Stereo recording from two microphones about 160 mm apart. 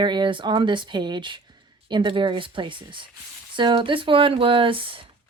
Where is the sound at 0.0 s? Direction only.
30° right (ahead or behind).